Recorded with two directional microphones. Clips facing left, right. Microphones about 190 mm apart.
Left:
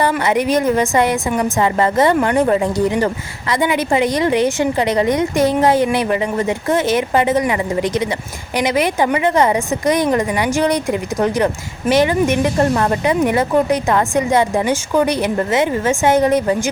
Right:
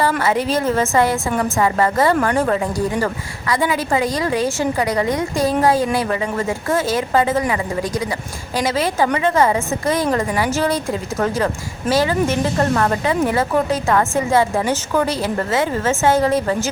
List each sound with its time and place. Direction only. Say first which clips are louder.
0.3 s a woman's voice: left 3 dB; 15° left (ahead or behind)